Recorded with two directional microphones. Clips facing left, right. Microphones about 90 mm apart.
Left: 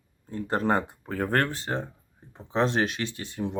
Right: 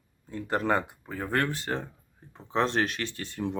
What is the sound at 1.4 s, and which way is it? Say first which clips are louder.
Speech: left 1 dB; 30° left (ahead or behind).